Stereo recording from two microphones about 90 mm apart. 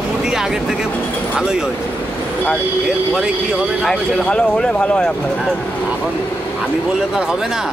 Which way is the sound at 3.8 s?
5° left (ahead or behind).